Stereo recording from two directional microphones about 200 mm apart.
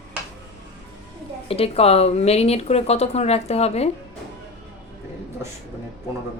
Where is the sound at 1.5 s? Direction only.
30° left (ahead or behind).